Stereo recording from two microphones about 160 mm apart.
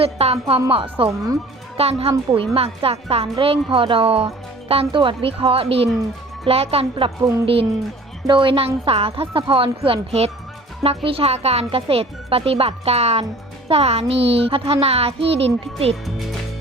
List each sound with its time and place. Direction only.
0.0 s speech: 40° right (ahead or behind)
15.9 s speech: centre (ahead or behind)